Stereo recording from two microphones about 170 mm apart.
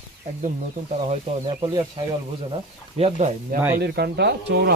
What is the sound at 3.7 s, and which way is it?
Speech, 70° right (ahead or behind).